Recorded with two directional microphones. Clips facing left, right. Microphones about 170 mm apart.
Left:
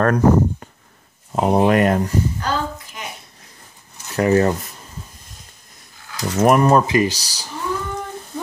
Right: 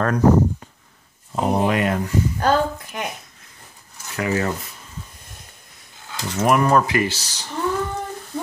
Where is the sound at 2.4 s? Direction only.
55° right (ahead or behind).